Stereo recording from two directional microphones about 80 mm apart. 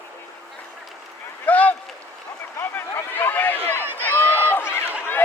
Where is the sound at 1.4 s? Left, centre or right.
Centre.